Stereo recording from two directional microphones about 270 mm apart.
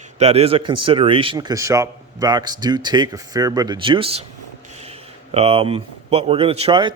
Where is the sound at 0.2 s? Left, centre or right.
Right.